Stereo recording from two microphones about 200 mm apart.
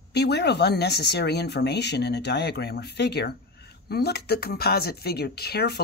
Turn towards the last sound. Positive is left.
turn(degrees=55)  # may be behind; listen again after turning